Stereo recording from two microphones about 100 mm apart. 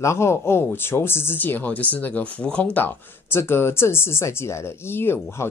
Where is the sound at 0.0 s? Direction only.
30° left (ahead or behind).